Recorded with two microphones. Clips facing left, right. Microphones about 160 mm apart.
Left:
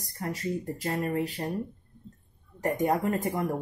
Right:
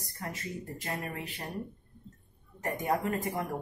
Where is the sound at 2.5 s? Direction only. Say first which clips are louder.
Left 5 dB; 40° left (ahead or behind).